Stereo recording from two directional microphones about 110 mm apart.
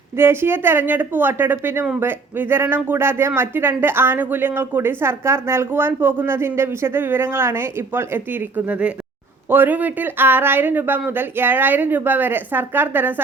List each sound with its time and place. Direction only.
0.2 s speech: 20° right (ahead or behind)